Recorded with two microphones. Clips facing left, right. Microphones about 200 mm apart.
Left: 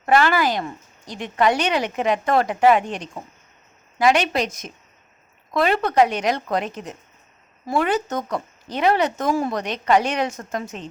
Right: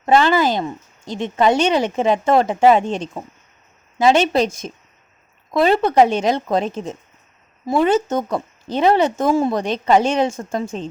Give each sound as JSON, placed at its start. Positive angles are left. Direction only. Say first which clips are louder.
{"t": 0.0, "sound": "a woman's voice", "louder": "right 3 dB", "side_deg": -20}